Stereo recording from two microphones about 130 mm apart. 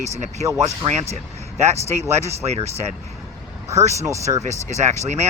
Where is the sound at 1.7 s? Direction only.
60° right (ahead or behind).